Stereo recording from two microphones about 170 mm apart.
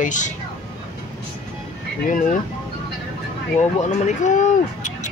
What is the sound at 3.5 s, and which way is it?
Speech, 40° left (ahead or behind).